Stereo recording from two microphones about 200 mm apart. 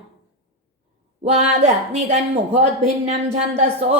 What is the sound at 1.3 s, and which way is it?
A woman's voice, 35° right (ahead or behind).